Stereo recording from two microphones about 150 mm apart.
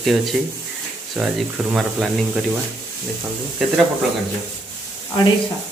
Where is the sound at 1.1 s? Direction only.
5° right (ahead or behind).